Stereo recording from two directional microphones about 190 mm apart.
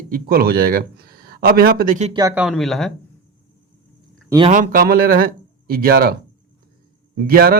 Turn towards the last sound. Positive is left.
turn(degrees=-50)  # may be behind; listen again after turning